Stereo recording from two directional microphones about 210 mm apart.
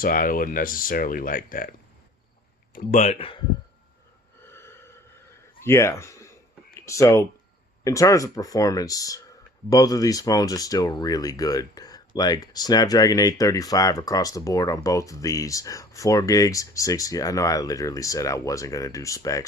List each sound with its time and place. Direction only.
0.0 s speech: 40° left (ahead or behind)
2.7 s speech: 35° left (ahead or behind)
4.4 s a sound: 10° left (ahead or behind)
5.6 s speech: 15° left (ahead or behind)